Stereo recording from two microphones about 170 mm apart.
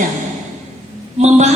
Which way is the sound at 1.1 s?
40° right (ahead or behind).